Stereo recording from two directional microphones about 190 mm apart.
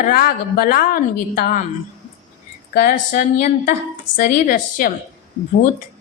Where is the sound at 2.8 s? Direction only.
50° left (ahead or behind).